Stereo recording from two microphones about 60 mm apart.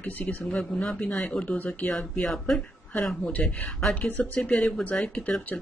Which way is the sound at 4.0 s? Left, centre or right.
Left.